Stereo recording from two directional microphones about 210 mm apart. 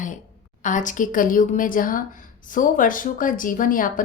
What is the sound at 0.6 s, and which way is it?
A woman's voice, 35° left (ahead or behind).